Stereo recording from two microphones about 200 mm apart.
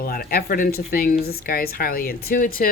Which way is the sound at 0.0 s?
45° left (ahead or behind).